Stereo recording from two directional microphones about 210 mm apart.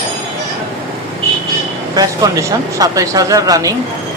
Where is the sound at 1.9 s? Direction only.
15° right (ahead or behind).